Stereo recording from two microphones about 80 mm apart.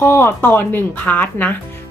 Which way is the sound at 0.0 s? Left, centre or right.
Left.